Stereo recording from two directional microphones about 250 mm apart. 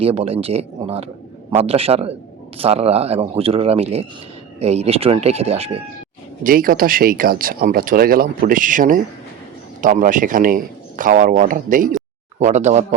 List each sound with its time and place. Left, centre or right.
0.0 s speech: right
6.4 s speech: right